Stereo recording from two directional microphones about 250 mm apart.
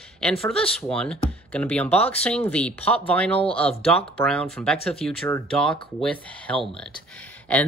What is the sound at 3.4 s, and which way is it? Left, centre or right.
Speech, left.